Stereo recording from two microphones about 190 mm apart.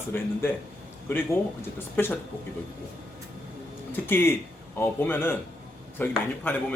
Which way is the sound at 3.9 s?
10° left (ahead or behind).